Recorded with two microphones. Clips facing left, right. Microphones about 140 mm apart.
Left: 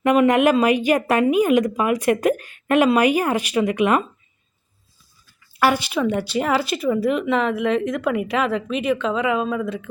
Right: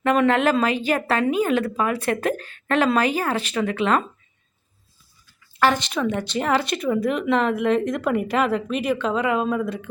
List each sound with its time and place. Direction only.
0.0 s a woman's voice: 10° left (ahead or behind)
5.5 s a woman's voice: 10° left (ahead or behind)